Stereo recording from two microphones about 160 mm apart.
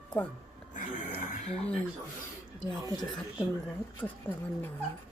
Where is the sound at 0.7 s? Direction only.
55° left (ahead or behind).